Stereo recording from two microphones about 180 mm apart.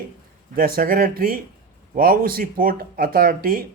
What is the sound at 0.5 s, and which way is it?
Speech, 55° right (ahead or behind).